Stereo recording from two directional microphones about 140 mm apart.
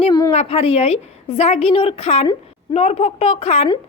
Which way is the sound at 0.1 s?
25° left (ahead or behind).